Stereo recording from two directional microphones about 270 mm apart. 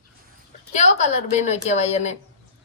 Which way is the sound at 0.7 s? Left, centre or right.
Left.